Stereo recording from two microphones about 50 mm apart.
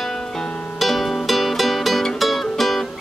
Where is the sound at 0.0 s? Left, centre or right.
Centre.